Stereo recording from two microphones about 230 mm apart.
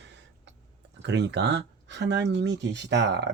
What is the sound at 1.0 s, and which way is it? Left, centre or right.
Speech, right.